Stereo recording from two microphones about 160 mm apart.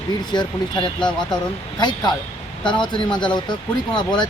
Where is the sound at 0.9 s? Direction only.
5° left (ahead or behind).